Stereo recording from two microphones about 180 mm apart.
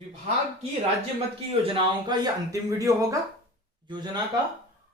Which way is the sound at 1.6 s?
25° right (ahead or behind).